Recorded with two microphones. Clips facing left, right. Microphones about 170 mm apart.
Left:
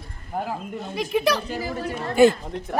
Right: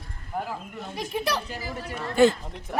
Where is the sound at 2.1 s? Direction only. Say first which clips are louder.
Left 3 dB; 10° left (ahead or behind).